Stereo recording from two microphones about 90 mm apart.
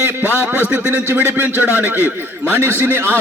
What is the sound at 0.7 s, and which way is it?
A man's voice, 20° right (ahead or behind).